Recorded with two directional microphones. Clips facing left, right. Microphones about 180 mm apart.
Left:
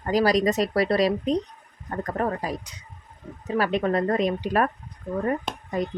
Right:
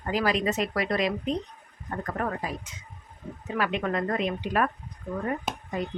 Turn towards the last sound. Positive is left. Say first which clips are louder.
# even
turn(degrees=-5)  # may be behind; listen again after turning